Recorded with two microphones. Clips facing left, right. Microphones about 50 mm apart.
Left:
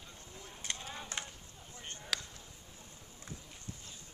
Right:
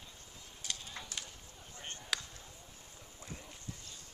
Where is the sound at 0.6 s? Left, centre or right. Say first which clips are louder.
Left 2 dB; left.